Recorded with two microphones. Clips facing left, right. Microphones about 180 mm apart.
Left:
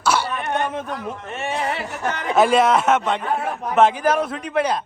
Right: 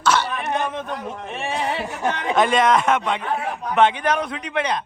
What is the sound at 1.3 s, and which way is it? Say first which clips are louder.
A man's voice: even; centre (ahead or behind).